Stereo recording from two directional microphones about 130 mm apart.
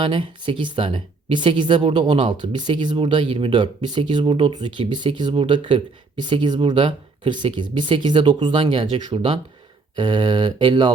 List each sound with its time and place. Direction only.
0.0 s speech: 45° right (ahead or behind)